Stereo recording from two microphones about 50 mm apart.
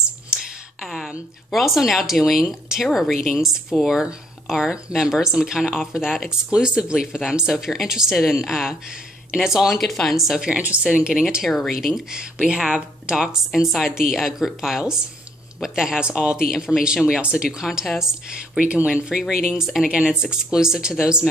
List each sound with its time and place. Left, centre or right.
0.8 s speech: centre
9.7 s speech: centre
10.9 s speech: right
11.1 s speech: centre
17.5 s speech: centre
18.6 s speech: right; by 19.9 s centre
19.9 s speech: right
20.4 s speech: centre